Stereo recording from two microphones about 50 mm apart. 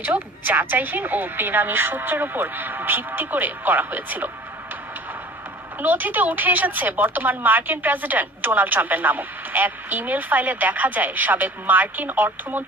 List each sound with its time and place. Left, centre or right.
0.0 s speech: right
5.8 s speech: right